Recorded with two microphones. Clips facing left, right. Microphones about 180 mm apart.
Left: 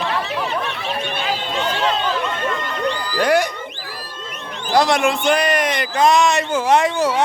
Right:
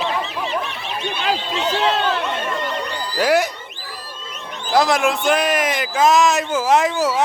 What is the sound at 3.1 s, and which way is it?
Speech, 5° right (ahead or behind).